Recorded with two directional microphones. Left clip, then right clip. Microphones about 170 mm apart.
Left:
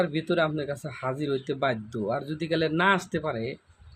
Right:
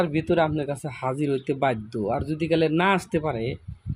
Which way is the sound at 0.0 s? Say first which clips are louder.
Right 3 dB; 20° right (ahead or behind).